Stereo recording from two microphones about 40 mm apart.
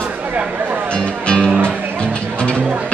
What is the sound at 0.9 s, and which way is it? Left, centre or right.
Music, left.